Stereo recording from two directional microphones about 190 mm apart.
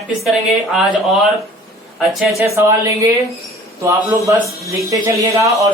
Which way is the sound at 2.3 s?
15° right (ahead or behind).